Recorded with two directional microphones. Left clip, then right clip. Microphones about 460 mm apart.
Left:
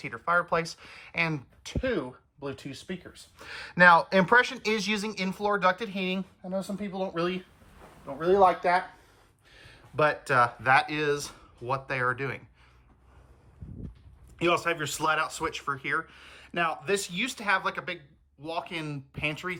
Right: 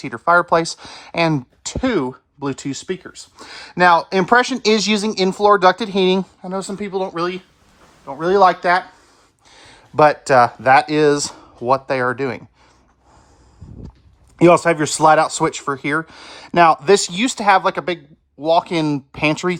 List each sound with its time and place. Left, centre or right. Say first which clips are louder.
0.0 s speech: right 12 dB; centre
14.3 s speech: right 14 dB; centre
19.4 s speech: right 13 dB; right